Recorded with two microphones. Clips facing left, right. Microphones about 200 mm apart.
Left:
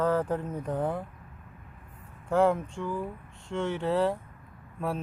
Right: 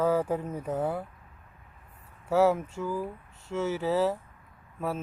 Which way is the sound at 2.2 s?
5° right (ahead or behind).